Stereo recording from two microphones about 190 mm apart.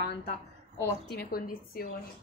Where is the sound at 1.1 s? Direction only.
55° left (ahead or behind).